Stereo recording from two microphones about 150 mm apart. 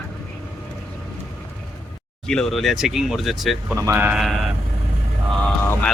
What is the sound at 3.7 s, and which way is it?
Speech, 15° right (ahead or behind).